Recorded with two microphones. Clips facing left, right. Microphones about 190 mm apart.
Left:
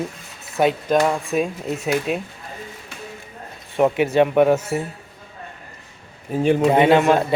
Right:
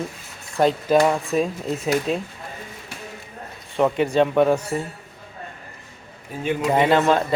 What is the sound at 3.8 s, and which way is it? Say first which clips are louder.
A man's voice: left 2 dB; 10° left (ahead or behind).